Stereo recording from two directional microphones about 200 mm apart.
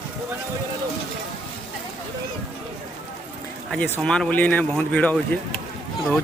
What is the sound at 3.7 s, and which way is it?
A man's voice, 10° left (ahead or behind).